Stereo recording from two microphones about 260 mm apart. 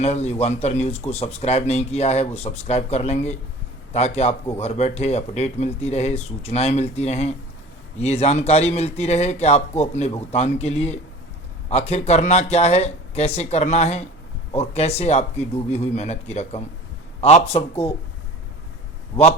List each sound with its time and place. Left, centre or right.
0.0 s speech: left